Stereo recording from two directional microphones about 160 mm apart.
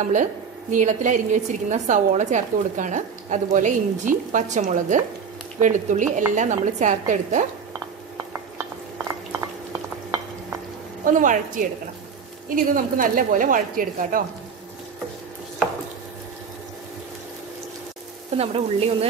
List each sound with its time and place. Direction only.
0.0 s a woman's voice: 55° right (ahead or behind)
8.3 s dishes: 15° right (ahead or behind)
11.1 s a woman's voice: 55° right (ahead or behind)
18.4 s sizzle: 40° right (ahead or behind)